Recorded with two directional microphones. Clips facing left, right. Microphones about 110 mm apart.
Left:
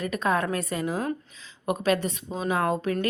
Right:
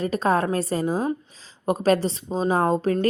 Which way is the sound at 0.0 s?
35° right (ahead or behind).